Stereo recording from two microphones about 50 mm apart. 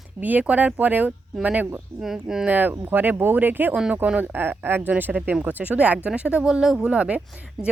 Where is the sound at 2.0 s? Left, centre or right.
Centre.